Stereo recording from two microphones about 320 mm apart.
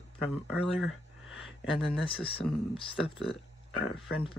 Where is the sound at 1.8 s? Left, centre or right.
Centre.